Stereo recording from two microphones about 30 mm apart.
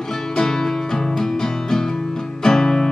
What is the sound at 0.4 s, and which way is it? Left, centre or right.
Music, centre.